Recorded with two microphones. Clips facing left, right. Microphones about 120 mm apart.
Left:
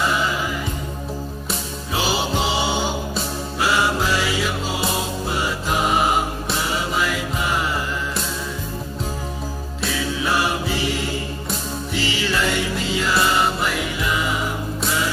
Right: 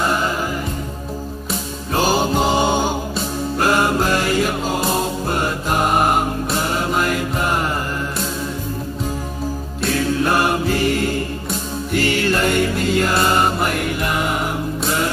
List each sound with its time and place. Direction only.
0.0 s music: 45° right (ahead or behind)
2.0 s music: 45° right (ahead or behind)
3.6 s mantra: 50° right (ahead or behind)
4.9 s music: 50° right (ahead or behind)
9.8 s music: 50° right (ahead or behind)